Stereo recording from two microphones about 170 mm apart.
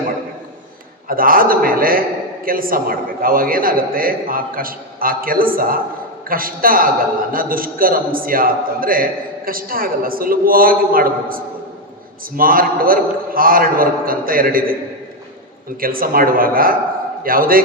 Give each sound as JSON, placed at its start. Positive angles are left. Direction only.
{"t": 1.0, "sound": "a man's voice", "side_deg": -55}
{"t": 15.8, "sound": "a man's voice", "side_deg": -55}